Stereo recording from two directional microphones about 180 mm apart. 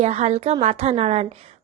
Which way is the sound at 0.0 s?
35° right (ahead or behind).